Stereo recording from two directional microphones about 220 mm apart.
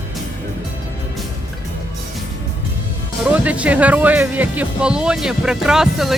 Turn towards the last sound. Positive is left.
turn(degrees=0)  # may be behind; listen again after turning